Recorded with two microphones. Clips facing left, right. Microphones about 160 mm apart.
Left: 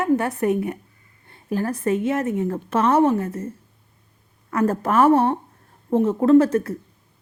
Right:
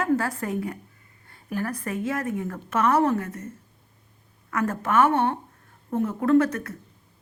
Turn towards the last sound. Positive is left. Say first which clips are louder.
# left 5 dB
turn(degrees=30)  # may be behind; listen again after turning